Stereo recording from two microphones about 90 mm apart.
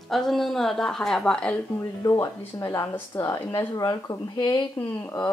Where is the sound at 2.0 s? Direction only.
35° left (ahead or behind).